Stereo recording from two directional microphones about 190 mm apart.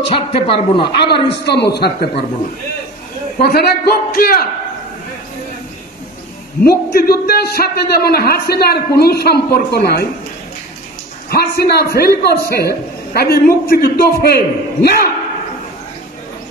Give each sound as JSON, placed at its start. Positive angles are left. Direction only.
{"t": 0.0, "sound": "a man's voice", "side_deg": 30}
{"t": 1.3, "sound": "a man's voice", "side_deg": 60}
{"t": 3.4, "sound": "a man's voice", "side_deg": 55}
{"t": 6.6, "sound": "a man's voice", "side_deg": 55}
{"t": 11.2, "sound": "a man's voice", "side_deg": 55}